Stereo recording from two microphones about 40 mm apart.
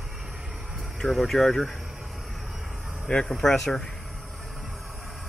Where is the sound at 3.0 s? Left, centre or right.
Left.